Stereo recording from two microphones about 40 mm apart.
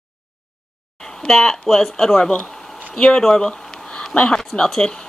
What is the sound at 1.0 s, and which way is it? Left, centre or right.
Speech, centre.